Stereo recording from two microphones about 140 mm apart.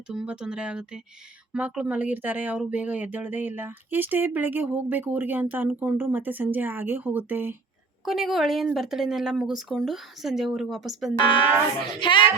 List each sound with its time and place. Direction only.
0.1 s speech: 5° right (ahead or behind)
8.0 s speech: centre (ahead or behind)
11.2 s speech: 35° left (ahead or behind)